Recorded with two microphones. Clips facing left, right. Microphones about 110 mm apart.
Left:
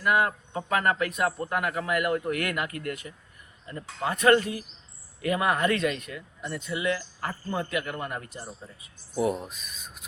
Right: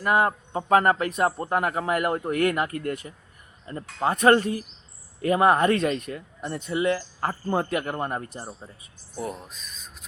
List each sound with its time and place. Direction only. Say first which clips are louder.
0.0 s speech: right 2 dB; 35° right (ahead or behind)
9.1 s speech: left 6 dB; 5° left (ahead or behind)